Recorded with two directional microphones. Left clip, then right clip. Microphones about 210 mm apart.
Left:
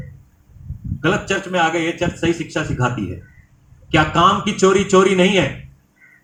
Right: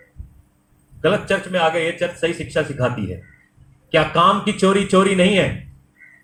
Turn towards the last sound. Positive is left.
turn(degrees=45)  # may be behind; listen again after turning